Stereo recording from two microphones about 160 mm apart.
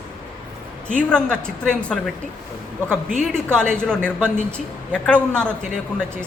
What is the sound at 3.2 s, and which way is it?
A woman's voice, 5° left (ahead or behind).